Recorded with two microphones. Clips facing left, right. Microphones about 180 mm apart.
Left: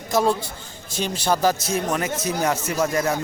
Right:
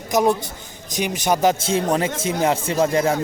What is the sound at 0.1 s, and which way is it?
A man's voice, 20° right (ahead or behind).